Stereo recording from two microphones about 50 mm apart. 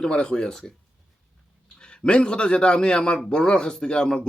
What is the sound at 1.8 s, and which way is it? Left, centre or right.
A man's voice, centre.